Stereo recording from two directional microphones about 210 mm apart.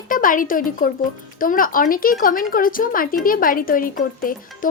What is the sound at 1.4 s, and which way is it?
A woman's voice, 40° left (ahead or behind).